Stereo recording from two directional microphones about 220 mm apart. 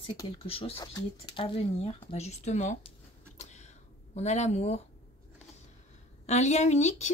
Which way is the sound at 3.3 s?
30° left (ahead or behind).